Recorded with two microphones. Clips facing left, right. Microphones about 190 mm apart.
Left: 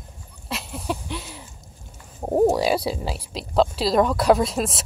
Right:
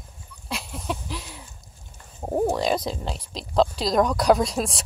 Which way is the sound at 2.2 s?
15° left (ahead or behind).